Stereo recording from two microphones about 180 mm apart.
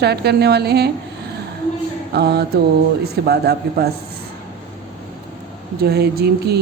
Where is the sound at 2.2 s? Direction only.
65° right (ahead or behind).